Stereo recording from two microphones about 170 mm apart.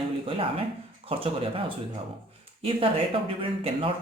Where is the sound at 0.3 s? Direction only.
35° right (ahead or behind).